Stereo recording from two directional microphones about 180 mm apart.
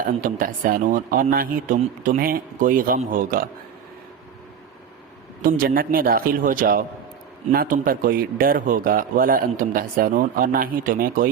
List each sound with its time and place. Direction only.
0.2 s a man's voice: 50° right (ahead or behind)
5.4 s a man's voice: 50° right (ahead or behind)